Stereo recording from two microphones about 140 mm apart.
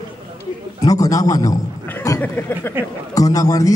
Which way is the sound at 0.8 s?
25° left (ahead or behind).